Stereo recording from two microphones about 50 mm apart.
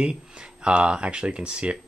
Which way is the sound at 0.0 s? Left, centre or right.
Centre.